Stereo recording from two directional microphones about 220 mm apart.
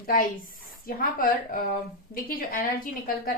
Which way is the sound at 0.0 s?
40° left (ahead or behind).